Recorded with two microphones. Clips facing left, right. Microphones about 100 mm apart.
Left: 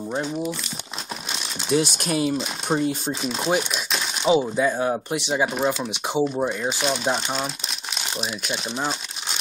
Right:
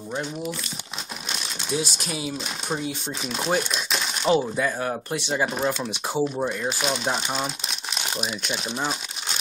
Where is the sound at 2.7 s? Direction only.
45° left (ahead or behind).